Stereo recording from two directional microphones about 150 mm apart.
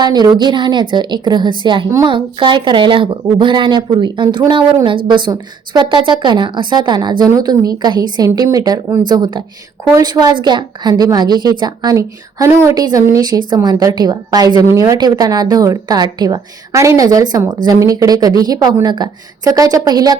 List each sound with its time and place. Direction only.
0.0 s speech: 30° right (ahead or behind)